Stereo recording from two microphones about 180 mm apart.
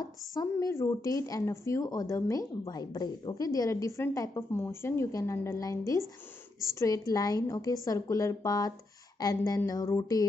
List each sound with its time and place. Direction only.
0.0 s speech: 20° left (ahead or behind)